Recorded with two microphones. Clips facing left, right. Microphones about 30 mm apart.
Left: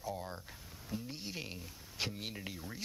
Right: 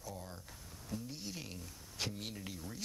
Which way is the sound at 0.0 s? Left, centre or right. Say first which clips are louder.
Left 6 dB; left.